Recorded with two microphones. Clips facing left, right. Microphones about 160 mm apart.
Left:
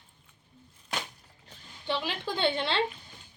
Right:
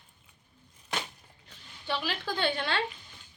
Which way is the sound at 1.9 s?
20° left (ahead or behind).